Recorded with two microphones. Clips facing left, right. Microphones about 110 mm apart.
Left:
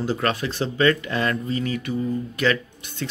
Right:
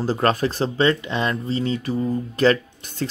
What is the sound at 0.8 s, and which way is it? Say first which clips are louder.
Speech: left 1 dB; 25° right (ahead or behind).